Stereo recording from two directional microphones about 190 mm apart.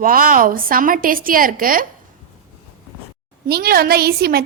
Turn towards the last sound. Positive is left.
turn(degrees=-55)  # may be behind; listen again after turning